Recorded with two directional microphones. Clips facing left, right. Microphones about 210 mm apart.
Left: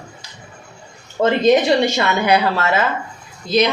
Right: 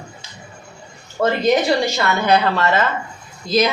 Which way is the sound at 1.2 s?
20° left (ahead or behind).